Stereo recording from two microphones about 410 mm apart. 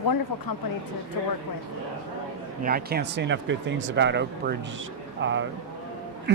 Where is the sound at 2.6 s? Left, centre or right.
Right.